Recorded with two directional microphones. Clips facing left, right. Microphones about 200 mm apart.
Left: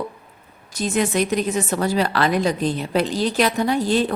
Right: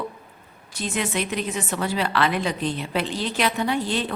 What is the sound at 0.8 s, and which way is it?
A woman's voice, 40° left (ahead or behind).